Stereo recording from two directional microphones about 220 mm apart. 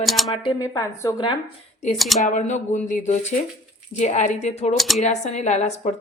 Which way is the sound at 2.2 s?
35° left (ahead or behind).